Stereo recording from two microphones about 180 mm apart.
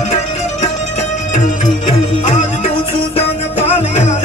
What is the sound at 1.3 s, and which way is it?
Music, 45° left (ahead or behind).